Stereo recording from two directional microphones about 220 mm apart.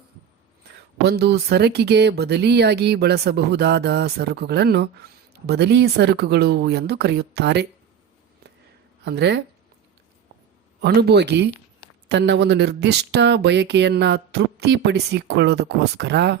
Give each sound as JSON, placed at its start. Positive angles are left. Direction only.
{"t": 1.0, "sound": "speech", "side_deg": -50}
{"t": 9.0, "sound": "speech", "side_deg": -50}
{"t": 10.8, "sound": "speech", "side_deg": -50}